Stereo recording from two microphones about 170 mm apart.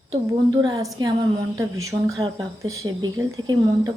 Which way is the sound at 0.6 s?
20° right (ahead or behind).